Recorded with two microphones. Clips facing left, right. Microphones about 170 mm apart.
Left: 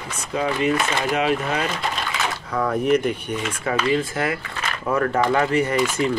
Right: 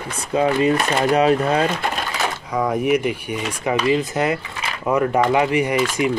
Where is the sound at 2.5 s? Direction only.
15° right (ahead or behind).